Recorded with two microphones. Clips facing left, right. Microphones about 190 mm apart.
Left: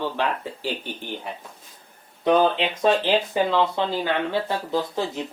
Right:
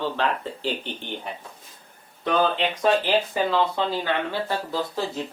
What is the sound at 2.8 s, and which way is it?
Speech, 20° left (ahead or behind).